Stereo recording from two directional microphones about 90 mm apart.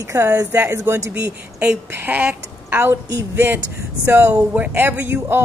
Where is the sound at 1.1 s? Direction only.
15° right (ahead or behind).